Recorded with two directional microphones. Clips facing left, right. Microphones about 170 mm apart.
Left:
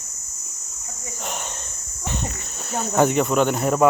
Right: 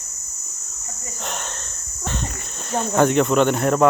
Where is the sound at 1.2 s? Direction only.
10° left (ahead or behind).